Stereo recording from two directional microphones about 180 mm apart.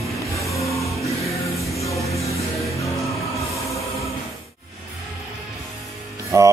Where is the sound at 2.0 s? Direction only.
15° left (ahead or behind).